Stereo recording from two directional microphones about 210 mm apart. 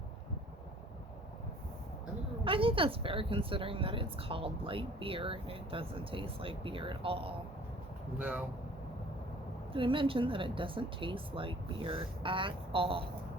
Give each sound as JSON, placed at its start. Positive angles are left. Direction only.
{"t": 2.4, "sound": "speech", "side_deg": -25}
{"t": 9.7, "sound": "speech", "side_deg": -25}